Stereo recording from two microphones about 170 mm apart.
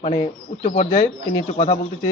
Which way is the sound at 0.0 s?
35° left (ahead or behind).